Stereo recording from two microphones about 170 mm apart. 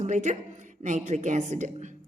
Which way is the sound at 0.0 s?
45° right (ahead or behind).